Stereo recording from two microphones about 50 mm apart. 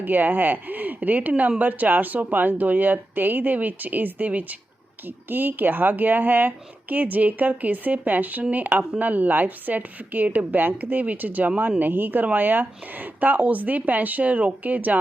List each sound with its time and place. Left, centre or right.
0.0 s speech: right